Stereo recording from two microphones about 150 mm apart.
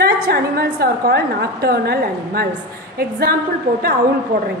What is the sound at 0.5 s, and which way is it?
A woman's voice, 90° right.